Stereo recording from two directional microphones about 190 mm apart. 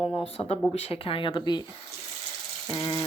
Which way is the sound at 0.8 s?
30° left (ahead or behind).